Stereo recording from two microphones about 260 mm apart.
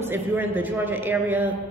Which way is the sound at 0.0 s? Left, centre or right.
Centre.